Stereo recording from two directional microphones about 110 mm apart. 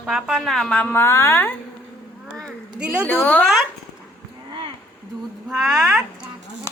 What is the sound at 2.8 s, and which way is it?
Speech, 10° right (ahead or behind).